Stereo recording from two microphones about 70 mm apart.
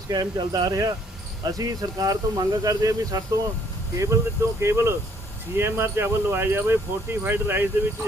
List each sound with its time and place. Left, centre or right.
0.1 s speech: right